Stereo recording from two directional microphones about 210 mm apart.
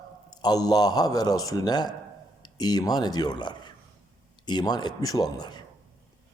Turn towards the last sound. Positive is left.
turn(degrees=20)  # may be behind; listen again after turning